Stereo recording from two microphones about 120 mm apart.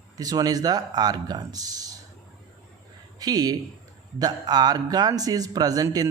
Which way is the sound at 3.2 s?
30° right (ahead or behind).